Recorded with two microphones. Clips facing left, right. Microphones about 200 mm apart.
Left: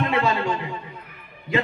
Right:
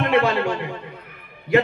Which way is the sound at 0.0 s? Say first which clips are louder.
Right 3 dB; 65° right (ahead or behind).